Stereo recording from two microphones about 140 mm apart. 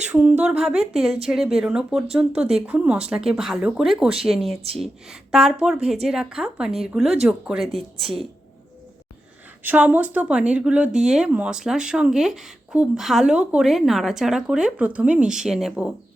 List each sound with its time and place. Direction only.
0.1 s speech: 10° right (ahead or behind)
9.6 s speech: 10° right (ahead or behind)